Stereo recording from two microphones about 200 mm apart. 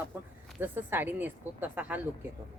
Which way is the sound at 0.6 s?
10° right (ahead or behind).